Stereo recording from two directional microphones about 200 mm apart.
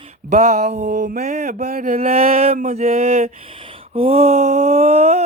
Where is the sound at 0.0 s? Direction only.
30° right (ahead or behind).